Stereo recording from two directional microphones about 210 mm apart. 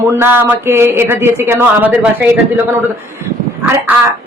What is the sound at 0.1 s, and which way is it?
Speech, 10° right (ahead or behind).